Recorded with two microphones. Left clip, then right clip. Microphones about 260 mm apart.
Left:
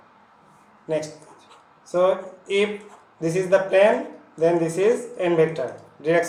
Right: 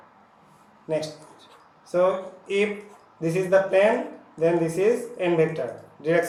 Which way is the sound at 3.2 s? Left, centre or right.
Centre.